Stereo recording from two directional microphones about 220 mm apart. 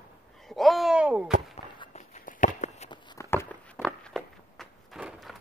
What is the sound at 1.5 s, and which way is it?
Walk, 30° left (ahead or behind).